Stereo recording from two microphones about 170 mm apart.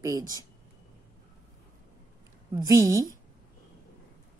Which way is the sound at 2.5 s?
20° right (ahead or behind).